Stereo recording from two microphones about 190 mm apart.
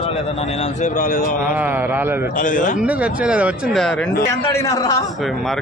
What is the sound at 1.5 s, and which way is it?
Speech, 10° right (ahead or behind).